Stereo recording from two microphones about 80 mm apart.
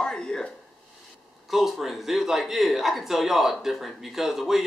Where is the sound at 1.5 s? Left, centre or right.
Centre.